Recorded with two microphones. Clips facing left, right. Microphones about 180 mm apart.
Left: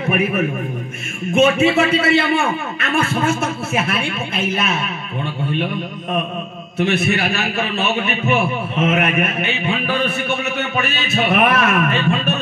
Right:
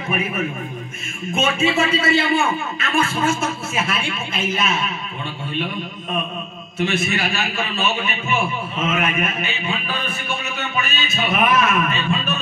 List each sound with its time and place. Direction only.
0.0 s a man's voice: 65° left (ahead or behind)
6.8 s a man's voice: 60° left (ahead or behind)